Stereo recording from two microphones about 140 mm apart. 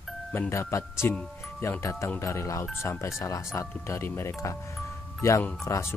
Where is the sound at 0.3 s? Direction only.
20° left (ahead or behind).